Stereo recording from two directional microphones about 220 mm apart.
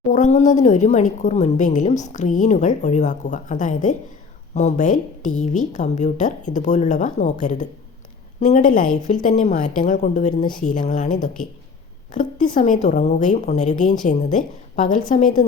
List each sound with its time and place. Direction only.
0.1 s speech: 35° left (ahead or behind)